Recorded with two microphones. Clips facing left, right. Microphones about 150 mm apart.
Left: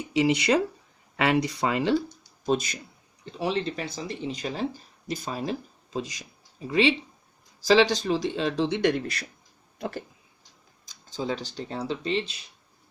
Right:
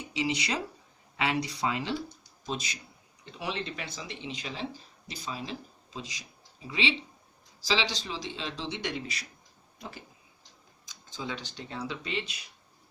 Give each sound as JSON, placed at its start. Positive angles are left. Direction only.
{"t": 0.1, "sound": "a man's voice", "side_deg": 55}
{"t": 3.3, "sound": "a man's voice", "side_deg": 35}
{"t": 10.8, "sound": "speech", "side_deg": 35}